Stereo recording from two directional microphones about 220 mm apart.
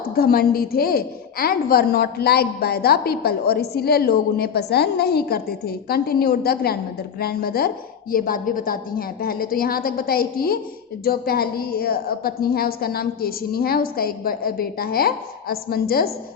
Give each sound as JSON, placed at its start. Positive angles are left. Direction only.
{"t": 0.2, "sound": "a woman's voice", "side_deg": 45}